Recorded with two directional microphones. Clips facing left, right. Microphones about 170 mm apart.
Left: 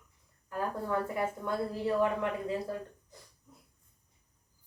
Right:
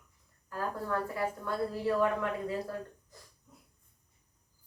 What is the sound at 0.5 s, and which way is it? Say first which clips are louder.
A woman's voice: left 1 dB; 20° left (ahead or behind).